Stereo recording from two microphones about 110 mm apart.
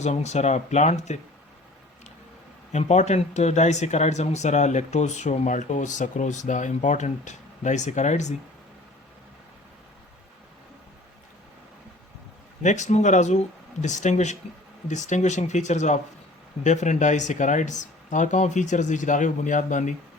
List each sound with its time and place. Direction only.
0.0 s speech: 90° left
2.7 s speech: 90° left
12.6 s speech: 90° left